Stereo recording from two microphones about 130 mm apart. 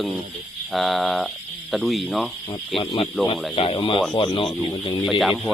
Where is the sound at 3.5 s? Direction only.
45° left (ahead or behind).